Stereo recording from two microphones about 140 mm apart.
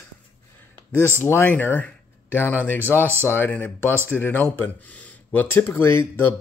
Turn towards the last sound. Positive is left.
turn(degrees=15)  # may be behind; listen again after turning